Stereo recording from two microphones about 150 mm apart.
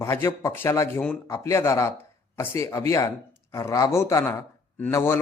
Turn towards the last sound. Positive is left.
turn(degrees=15)  # may be behind; listen again after turning